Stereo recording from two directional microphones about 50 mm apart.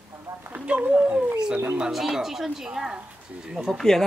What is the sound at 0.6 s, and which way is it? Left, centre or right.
Speech, right.